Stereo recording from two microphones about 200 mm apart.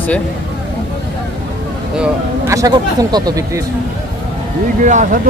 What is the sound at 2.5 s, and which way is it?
Speech, 20° right (ahead or behind).